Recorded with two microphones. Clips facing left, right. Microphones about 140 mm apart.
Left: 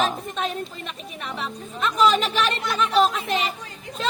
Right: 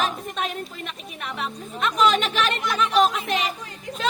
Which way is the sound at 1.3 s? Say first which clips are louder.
Right 1 dB; centre (ahead or behind).